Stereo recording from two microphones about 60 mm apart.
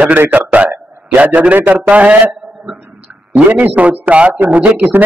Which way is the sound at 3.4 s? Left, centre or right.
Right.